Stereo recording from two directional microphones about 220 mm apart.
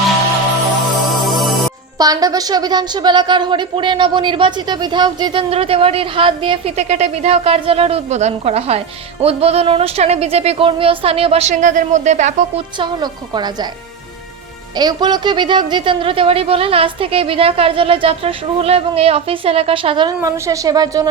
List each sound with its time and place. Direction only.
1.2 s music: centre (ahead or behind)
2.0 s a woman's voice: 15° right (ahead or behind)
14.8 s a woman's voice: 20° right (ahead or behind)